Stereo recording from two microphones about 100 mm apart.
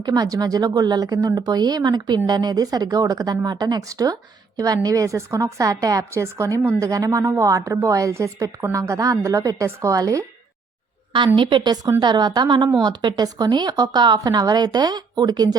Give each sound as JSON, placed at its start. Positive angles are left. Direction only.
{"t": 0.0, "sound": "a woman's voice", "side_deg": -40}
{"t": 11.3, "sound": "a woman's voice", "side_deg": -50}